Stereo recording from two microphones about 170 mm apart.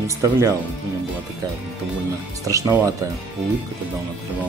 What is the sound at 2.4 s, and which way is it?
Speech, 20° right (ahead or behind).